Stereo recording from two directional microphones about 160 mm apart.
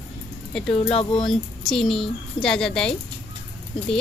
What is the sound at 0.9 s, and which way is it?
Speech, 35° left (ahead or behind).